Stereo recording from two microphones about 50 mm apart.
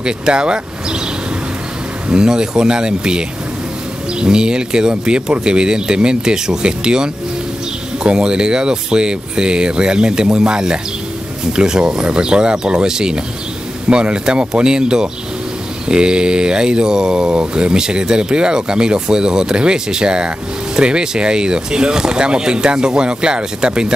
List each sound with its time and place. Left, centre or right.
0.0 s speech: centre
2.0 s speech: centre